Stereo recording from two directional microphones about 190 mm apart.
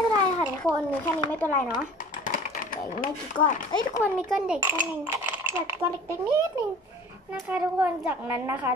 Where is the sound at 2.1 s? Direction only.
45° left (ahead or behind).